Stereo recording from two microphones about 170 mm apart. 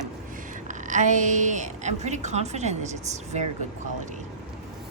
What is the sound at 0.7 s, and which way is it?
A woman's voice, 45° right (ahead or behind).